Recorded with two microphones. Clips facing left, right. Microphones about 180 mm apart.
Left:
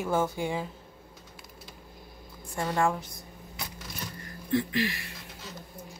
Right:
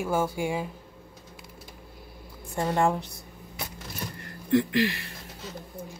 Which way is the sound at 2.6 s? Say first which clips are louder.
Right 3 dB; 20° right (ahead or behind).